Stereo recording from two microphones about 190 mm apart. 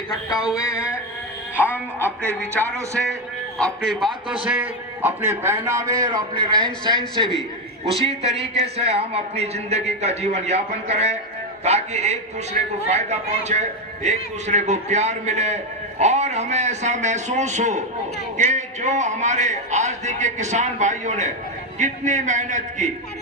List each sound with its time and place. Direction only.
0.3 s a man's voice: 5° right (ahead or behind)
3.6 s a man's voice: centre (ahead or behind); by 6.9 s 25° right (ahead or behind)
8.0 s speech: 35° right (ahead or behind)
12.6 s speech: 45° right (ahead or behind)